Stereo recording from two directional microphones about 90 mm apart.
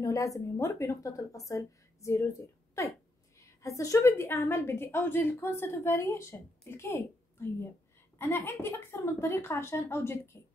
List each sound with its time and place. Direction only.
0.0 s speech: 35° left (ahead or behind)
3.3 s a woman's voice: 35° left (ahead or behind)